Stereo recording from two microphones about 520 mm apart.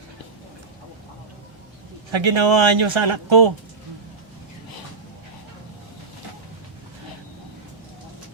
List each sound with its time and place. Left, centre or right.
2.0 s a man's voice: right